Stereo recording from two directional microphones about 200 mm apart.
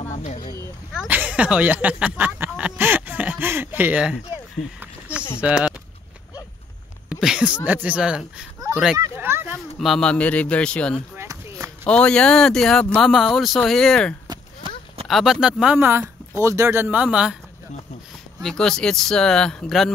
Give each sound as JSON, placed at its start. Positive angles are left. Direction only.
{"t": 0.1, "sound": "vehicle", "side_deg": 35}
{"t": 0.4, "sound": "vehicle", "side_deg": 20}
{"t": 0.9, "sound": "speech", "side_deg": -5}
{"t": 4.6, "sound": "speech", "side_deg": 35}
{"t": 5.4, "sound": "speech", "side_deg": -5}
{"t": 7.1, "sound": "sneeze", "side_deg": -5}
{"t": 7.6, "sound": "speech", "side_deg": -10}
{"t": 8.9, "sound": "speech", "side_deg": -15}
{"t": 9.8, "sound": "speech", "side_deg": 0}
{"t": 11.1, "sound": "chop", "side_deg": -15}
{"t": 11.8, "sound": "speech", "side_deg": 5}
{"t": 14.2, "sound": "a sound", "side_deg": -20}
{"t": 15.0, "sound": "speech", "side_deg": 0}
{"t": 18.4, "sound": "speech", "side_deg": 5}